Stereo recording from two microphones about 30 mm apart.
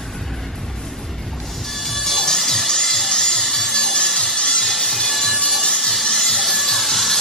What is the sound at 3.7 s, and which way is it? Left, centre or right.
Music, left.